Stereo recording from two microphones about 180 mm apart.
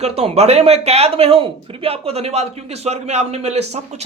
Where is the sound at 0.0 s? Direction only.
35° right (ahead or behind).